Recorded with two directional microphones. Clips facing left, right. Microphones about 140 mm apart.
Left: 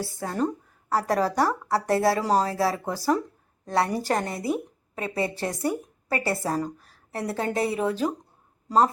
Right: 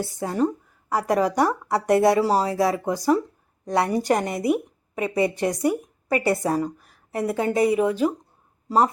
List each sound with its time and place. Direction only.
0.0 s a woman's voice: 20° right (ahead or behind)
0.3 s a woman's voice: 10° right (ahead or behind)